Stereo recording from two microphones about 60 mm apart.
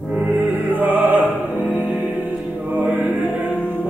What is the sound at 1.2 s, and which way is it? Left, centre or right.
Music, left.